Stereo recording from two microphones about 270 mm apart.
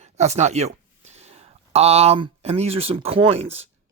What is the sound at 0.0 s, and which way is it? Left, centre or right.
Speech, right.